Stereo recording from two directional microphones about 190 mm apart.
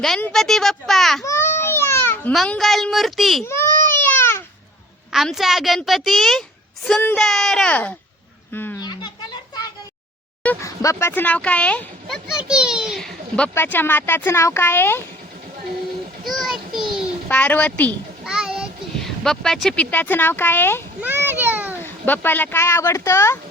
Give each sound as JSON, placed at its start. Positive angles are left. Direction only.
{"t": 0.0, "sound": "a child's voice", "side_deg": 0}
{"t": 1.2, "sound": "a child's voice", "side_deg": 15}
{"t": 3.4, "sound": "baby cry", "side_deg": 15}
{"t": 5.1, "sound": "a child's voice", "side_deg": 0}
{"t": 8.8, "sound": "children playing", "side_deg": 20}
{"t": 10.4, "sound": "speech", "side_deg": 10}
{"t": 16.2, "sound": "children playing", "side_deg": 0}
{"t": 17.2, "sound": "speech", "side_deg": 10}
{"t": 18.3, "sound": "a child's voice", "side_deg": -5}
{"t": 21.0, "sound": "a sound", "side_deg": -10}
{"t": 21.8, "sound": "speech", "side_deg": 10}